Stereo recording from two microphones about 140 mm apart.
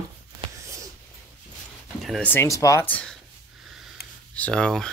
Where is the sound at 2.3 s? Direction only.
20° left (ahead or behind); by 3.9 s 5° right (ahead or behind).